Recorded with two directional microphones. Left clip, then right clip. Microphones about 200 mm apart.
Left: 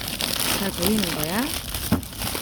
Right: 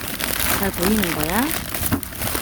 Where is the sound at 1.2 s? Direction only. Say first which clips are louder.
Right 4 dB; 35° right (ahead or behind).